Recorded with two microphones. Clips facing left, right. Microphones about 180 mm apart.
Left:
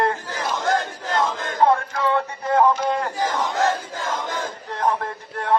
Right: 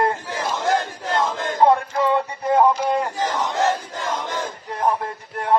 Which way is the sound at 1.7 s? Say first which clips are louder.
Right 2 dB; 20° right (ahead or behind).